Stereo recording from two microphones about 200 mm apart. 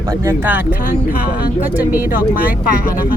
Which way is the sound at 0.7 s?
45° left (ahead or behind).